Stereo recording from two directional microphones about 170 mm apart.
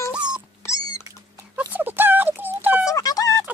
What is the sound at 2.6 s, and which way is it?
Music, 10° right (ahead or behind).